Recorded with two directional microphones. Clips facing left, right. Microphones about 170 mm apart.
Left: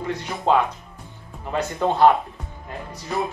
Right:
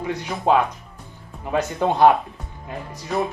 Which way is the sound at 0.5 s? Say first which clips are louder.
Right 1 dB; 15° right (ahead or behind).